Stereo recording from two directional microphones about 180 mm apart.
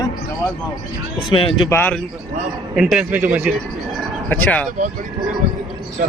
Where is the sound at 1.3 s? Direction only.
25° left (ahead or behind).